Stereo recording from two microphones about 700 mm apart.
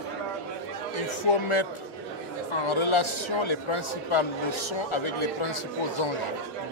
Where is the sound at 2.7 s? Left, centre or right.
Left.